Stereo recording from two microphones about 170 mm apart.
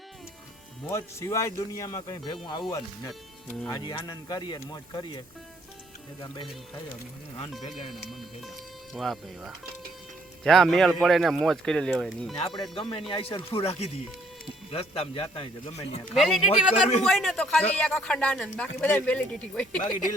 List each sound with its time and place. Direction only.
0.9 s speech: 15° left (ahead or behind)
6.2 s speech: 25° left (ahead or behind)
8.2 s speech: centre (ahead or behind)
12.4 s a man's voice: 30° left (ahead or behind)
16.1 s speech: centre (ahead or behind)